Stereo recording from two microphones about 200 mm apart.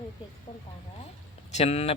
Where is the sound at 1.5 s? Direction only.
35° left (ahead or behind).